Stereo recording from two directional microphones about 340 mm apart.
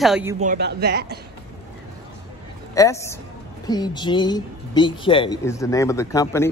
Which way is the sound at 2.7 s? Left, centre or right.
Centre.